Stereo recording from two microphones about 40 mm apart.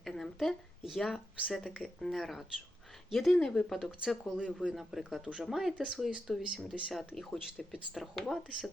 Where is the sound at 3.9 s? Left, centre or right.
Right.